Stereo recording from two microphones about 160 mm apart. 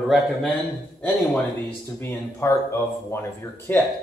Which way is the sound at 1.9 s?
15° left (ahead or behind).